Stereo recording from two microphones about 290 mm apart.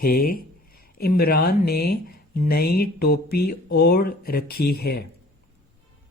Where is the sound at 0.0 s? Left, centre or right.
Left.